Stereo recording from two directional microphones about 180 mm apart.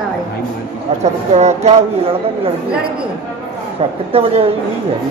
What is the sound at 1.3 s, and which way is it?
Speech, 40° right (ahead or behind).